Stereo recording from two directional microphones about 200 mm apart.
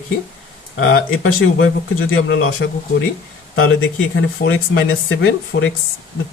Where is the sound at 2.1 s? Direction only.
85° left.